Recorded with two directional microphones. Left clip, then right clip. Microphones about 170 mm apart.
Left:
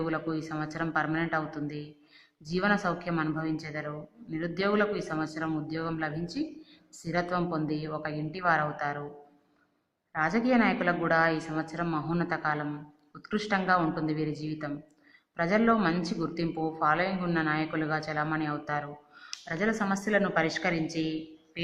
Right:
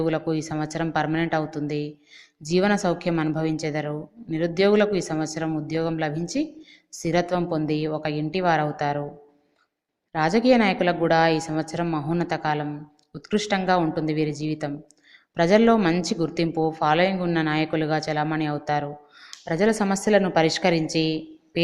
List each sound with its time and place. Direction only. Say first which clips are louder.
0.0 s a woman's voice: right 7 dB; 30° right (ahead or behind)
10.1 s a woman's voice: right 8 dB; 35° right (ahead or behind)